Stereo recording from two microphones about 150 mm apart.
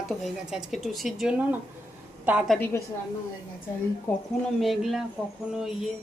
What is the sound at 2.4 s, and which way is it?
Speech, 10° left (ahead or behind).